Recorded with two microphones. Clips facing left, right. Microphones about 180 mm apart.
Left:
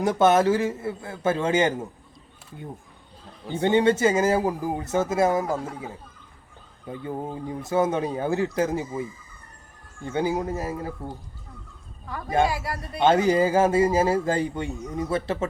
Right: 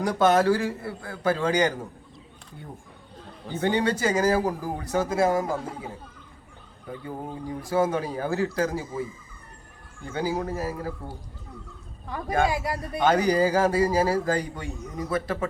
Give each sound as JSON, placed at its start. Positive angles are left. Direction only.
{"t": 0.0, "sound": "speech", "side_deg": 25}
{"t": 3.5, "sound": "speech", "side_deg": 20}
{"t": 7.0, "sound": "speech", "side_deg": 20}
{"t": 10.1, "sound": "speech", "side_deg": 25}
{"t": 12.5, "sound": "a man's voice", "side_deg": -20}
{"t": 13.0, "sound": "speech", "side_deg": 25}